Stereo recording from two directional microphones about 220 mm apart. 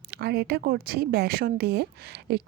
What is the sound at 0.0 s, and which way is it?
A woman's voice, 45° right (ahead or behind).